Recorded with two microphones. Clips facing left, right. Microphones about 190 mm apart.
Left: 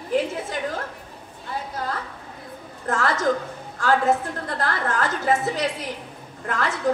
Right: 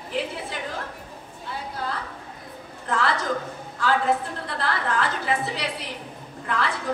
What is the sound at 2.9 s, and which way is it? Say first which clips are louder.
A woman's voice: left 3 dB; 45° left (ahead or behind).